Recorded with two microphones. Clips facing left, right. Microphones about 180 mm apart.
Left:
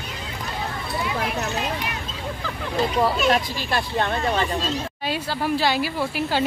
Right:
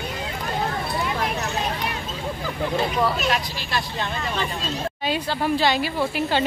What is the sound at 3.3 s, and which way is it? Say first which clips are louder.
Speech: left 3 dB; 50° left (ahead or behind).